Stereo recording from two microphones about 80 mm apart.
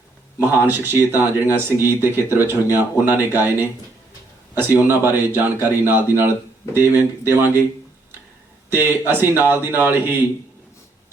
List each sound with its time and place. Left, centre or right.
0.3 s speech: right
4.7 s speech: right
8.7 s speech: right